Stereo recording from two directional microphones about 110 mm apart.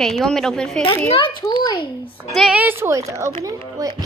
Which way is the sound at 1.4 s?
40° left (ahead or behind).